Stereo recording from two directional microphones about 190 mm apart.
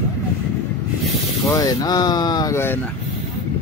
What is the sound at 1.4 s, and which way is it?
Speech, 20° left (ahead or behind).